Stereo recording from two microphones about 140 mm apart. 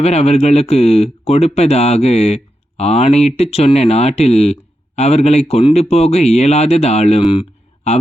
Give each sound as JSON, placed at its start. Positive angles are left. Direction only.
{"t": 0.0, "sound": "speech", "side_deg": 50}